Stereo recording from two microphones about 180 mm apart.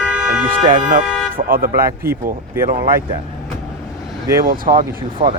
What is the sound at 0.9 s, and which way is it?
Speech, 50° right (ahead or behind).